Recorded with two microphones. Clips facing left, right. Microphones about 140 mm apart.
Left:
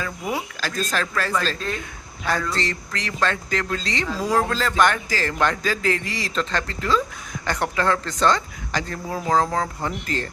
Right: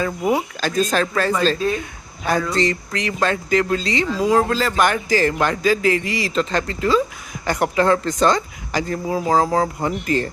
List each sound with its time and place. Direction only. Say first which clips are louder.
0.0 s speech: right 8 dB; 25° right (ahead or behind); by 10.2 s 10° right (ahead or behind)